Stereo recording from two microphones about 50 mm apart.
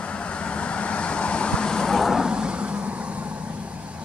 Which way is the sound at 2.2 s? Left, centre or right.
Centre.